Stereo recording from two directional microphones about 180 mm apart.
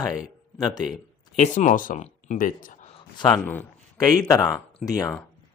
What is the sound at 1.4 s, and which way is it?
Speech, 40° left (ahead or behind).